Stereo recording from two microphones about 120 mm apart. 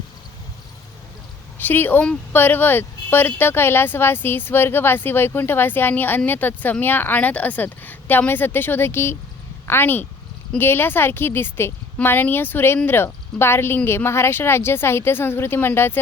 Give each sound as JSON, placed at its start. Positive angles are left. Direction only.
{"t": 1.5, "sound": "a woman's voice", "side_deg": 15}